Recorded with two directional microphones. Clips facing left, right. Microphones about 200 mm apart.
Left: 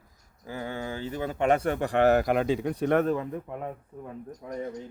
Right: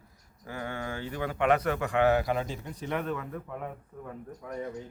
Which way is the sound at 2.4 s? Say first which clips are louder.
Left 9 dB; 70° left (ahead or behind).